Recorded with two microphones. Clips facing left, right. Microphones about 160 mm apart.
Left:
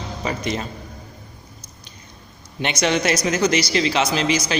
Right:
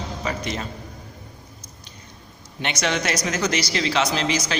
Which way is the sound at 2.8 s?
20° left (ahead or behind).